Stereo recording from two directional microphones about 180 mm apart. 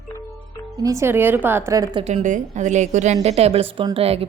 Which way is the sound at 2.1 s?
40° right (ahead or behind).